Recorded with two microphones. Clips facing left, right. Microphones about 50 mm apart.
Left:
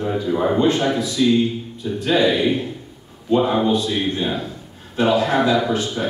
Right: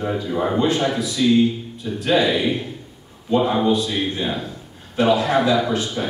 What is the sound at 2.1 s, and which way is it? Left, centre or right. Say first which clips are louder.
A man's voice: left 1 dB; centre.